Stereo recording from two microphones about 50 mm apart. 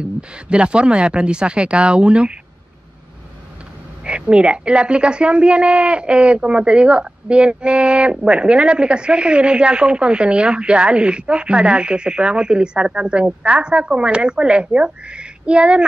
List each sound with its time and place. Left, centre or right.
0.0 s a woman's voice: centre
4.0 s a woman's voice: centre